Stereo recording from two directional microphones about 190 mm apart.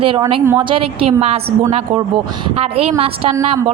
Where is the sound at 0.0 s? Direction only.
25° right (ahead or behind).